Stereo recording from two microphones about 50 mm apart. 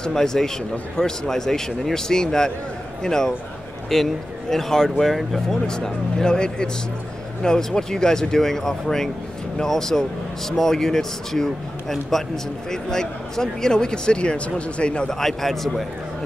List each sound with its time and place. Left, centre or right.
0.0 s speech: centre
15.1 s a man's voice: centre